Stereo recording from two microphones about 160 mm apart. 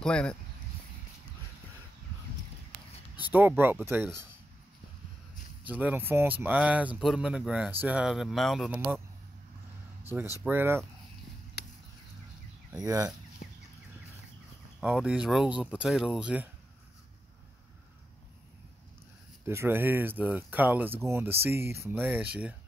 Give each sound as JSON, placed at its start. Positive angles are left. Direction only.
{"t": 0.0, "sound": "speech", "side_deg": 5}
{"t": 3.2, "sound": "speech", "side_deg": -10}
{"t": 5.7, "sound": "speech", "side_deg": -10}
{"t": 10.4, "sound": "speech", "side_deg": -15}
{"t": 12.7, "sound": "speech", "side_deg": -20}
{"t": 13.4, "sound": "a sound", "side_deg": 65}
{"t": 14.8, "sound": "speech", "side_deg": -5}
{"t": 19.4, "sound": "speech", "side_deg": -15}